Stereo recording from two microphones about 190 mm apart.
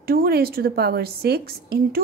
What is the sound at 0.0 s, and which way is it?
A woman's voice, 50° right (ahead or behind).